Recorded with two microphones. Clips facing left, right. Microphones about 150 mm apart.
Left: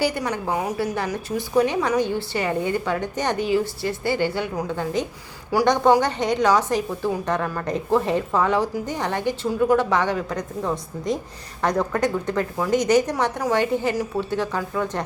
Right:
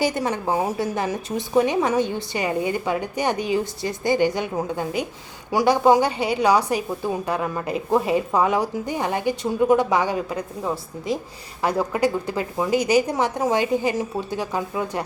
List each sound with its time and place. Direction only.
0.0 s a woman's voice: 25° right (ahead or behind)